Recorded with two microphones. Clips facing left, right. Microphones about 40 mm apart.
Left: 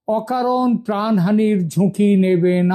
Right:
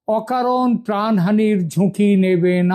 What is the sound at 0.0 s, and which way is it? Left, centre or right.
Speech, right.